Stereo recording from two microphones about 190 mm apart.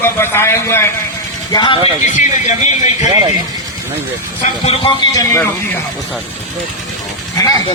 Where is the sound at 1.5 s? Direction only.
25° left (ahead or behind).